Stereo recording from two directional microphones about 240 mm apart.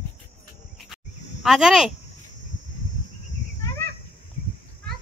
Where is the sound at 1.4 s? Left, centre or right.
Centre.